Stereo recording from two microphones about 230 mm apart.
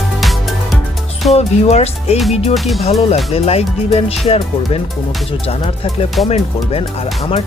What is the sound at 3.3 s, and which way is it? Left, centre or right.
Speech, left.